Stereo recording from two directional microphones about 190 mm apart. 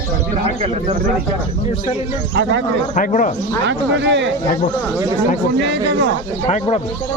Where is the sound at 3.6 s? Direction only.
70° right (ahead or behind).